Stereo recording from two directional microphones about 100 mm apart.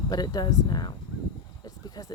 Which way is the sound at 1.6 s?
40° left (ahead or behind).